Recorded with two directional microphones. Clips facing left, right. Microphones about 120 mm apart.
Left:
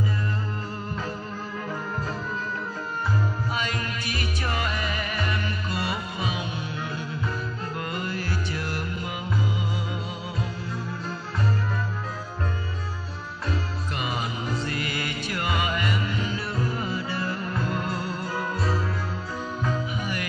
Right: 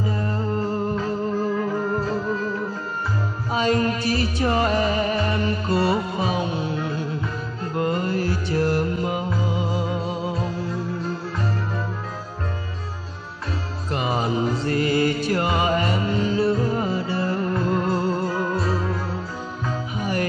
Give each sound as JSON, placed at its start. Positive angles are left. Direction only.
{"t": 0.2, "sound": "music", "side_deg": -35}
{"t": 3.5, "sound": "music", "side_deg": -35}
{"t": 13.9, "sound": "music", "side_deg": -35}